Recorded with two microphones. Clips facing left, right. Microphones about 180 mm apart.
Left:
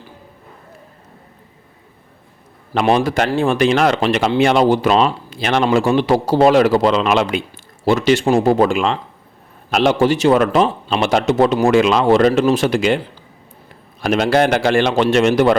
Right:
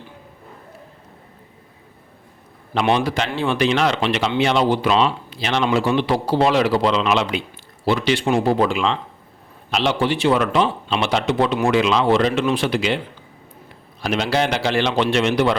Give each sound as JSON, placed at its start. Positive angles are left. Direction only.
{"t": 2.8, "sound": "speech", "side_deg": 45}